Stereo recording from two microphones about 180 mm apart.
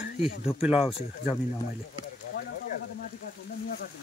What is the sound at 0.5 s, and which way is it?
Speech, 5° right (ahead or behind).